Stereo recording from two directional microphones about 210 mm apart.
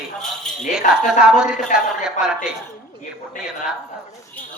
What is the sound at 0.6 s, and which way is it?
Speech, 35° left (ahead or behind).